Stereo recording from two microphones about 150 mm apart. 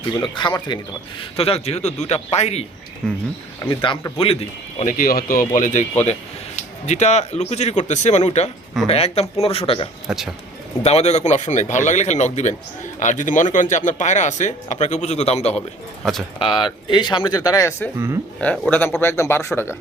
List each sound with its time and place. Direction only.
0.2 s speech: 30° left (ahead or behind)
1.4 s speech: 40° left (ahead or behind)
3.0 s speech: 5° left (ahead or behind)
3.7 s speech: 35° left (ahead or behind)
4.9 s speech: 70° left (ahead or behind)
5.5 s speech: 55° left (ahead or behind)
16.4 s speech: 35° left (ahead or behind); by 17.9 s 15° left (ahead or behind)
17.9 s speech: 20° right (ahead or behind)
18.3 s speech: 10° left (ahead or behind)